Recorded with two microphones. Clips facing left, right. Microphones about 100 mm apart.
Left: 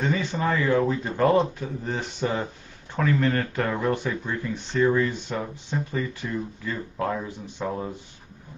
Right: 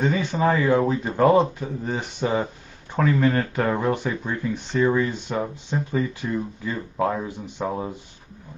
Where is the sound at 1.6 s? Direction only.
15° right (ahead or behind).